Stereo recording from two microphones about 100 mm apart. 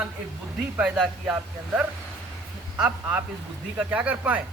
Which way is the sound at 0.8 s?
5° right (ahead or behind).